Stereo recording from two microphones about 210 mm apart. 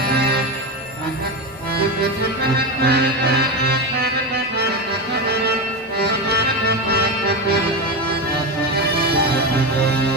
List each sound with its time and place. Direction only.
2.8 s music: 50° right (ahead or behind)
6.0 s music: 50° right (ahead or behind)
8.7 s music: 50° right (ahead or behind)